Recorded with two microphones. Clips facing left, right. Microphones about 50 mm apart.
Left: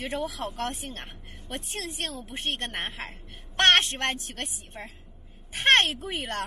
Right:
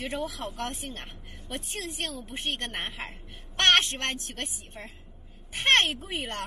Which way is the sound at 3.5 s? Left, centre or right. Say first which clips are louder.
Left 2 dB; left.